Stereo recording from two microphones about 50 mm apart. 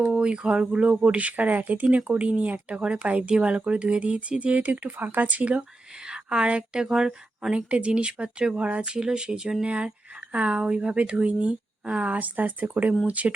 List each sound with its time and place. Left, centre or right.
0.2 s speech: right
6.1 s speech: centre
7.5 s speech: right
8.8 s speech: centre
9.6 s speech: right
12.1 s speech: right